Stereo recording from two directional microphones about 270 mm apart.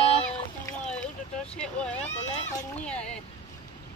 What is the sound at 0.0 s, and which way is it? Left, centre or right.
Boat, left.